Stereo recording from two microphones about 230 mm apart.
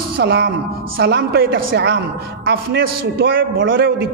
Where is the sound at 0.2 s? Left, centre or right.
Right.